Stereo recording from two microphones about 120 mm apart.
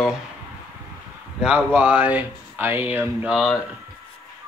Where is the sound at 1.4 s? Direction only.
10° right (ahead or behind).